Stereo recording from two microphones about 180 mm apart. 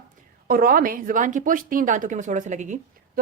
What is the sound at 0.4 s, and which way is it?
A woman's voice, 55° right (ahead or behind).